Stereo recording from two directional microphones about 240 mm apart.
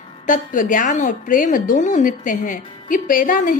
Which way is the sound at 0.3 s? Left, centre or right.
Left.